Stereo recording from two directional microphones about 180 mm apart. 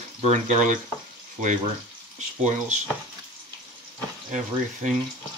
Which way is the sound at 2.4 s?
40° right (ahead or behind).